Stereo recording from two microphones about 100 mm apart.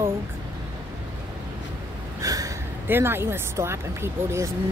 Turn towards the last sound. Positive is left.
turn(degrees=-30)  # may be behind; listen again after turning